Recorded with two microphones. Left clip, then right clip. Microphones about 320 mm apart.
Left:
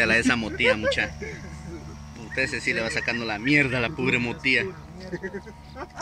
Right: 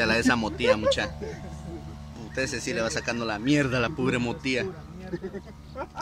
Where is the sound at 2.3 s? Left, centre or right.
Centre.